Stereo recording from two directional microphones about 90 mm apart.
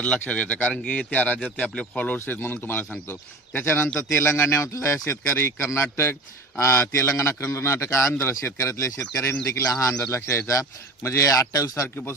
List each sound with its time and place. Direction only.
0.0 s speech: 15° left (ahead or behind)
2.1 s a man's voice: 25° left (ahead or behind)